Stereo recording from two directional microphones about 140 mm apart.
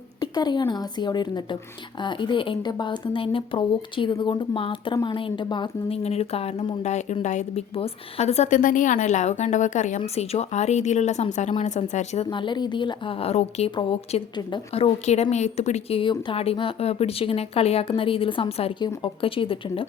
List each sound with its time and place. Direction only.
0.2 s speech: 30° left (ahead or behind)
6.0 s a woman's voice: 45° left (ahead or behind)
12.3 s a woman's voice: 35° left (ahead or behind)